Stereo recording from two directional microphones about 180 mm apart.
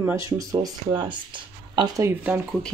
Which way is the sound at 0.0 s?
15° right (ahead or behind).